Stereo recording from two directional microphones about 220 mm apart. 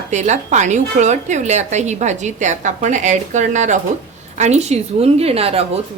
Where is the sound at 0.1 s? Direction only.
30° right (ahead or behind).